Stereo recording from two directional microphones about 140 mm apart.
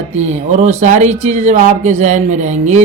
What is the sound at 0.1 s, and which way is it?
Speech, 55° right (ahead or behind).